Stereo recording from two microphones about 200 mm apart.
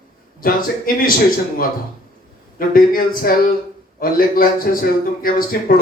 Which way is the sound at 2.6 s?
45° left (ahead or behind).